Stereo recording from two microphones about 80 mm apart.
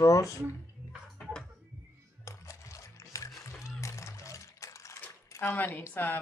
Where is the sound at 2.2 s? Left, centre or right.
Left.